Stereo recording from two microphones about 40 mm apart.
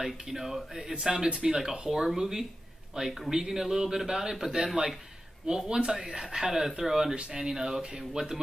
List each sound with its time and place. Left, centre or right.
0.0 s a man's voice: centre
1.3 s speech: right
1.6 s a man's voice: centre